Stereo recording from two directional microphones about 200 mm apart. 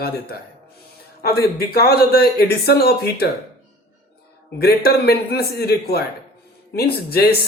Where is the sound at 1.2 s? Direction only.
50° left (ahead or behind).